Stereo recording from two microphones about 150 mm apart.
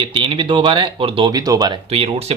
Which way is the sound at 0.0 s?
35° right (ahead or behind).